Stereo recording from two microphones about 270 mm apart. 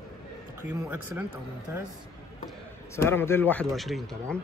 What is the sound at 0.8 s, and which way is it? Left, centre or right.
Speech, centre.